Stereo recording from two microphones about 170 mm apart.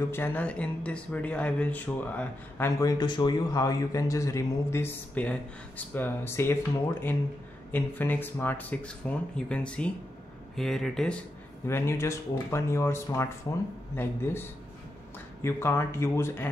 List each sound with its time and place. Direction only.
0.1 s speech: 10° left (ahead or behind)
15.4 s speech: 15° left (ahead or behind)